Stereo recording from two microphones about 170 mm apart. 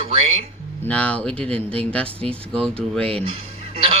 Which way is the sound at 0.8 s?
10° left (ahead or behind).